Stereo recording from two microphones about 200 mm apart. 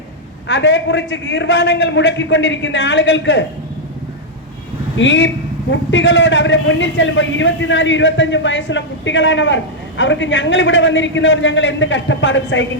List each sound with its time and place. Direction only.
0.4 s a man's voice: 65° left (ahead or behind)
4.9 s a man's voice: 65° left (ahead or behind)